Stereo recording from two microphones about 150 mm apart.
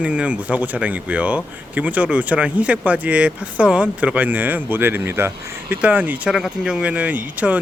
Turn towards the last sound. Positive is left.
turn(degrees=-10)  # may be behind; listen again after turning